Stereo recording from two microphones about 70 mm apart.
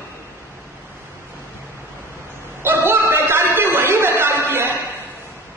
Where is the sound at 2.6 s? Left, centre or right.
Right.